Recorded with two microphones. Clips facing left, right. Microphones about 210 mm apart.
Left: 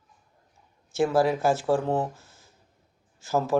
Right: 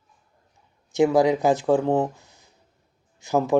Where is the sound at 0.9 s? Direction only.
15° right (ahead or behind).